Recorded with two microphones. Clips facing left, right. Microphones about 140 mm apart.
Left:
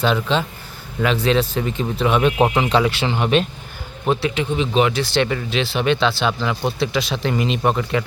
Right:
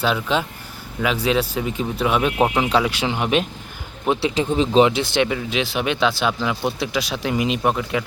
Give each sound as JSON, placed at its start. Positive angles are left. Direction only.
{"t": 0.0, "sound": "a man's voice", "side_deg": -10}
{"t": 4.2, "sound": "speech", "side_deg": -35}
{"t": 5.2, "sound": "a man's voice", "side_deg": -10}